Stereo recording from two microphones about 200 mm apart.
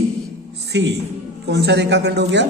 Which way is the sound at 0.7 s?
60° right (ahead or behind).